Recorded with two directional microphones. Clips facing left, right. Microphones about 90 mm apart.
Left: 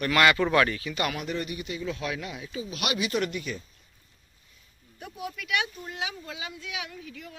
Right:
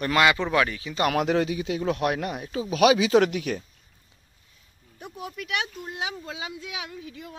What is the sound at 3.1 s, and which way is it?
Speech, 90° right.